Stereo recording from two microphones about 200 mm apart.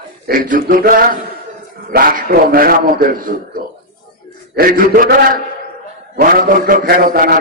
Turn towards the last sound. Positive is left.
turn(degrees=-45)  # may be behind; listen again after turning